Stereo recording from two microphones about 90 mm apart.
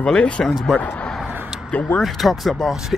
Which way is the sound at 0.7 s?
15° left (ahead or behind).